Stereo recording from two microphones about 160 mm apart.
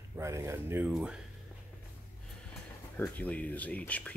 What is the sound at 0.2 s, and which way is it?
Speech, 15° right (ahead or behind).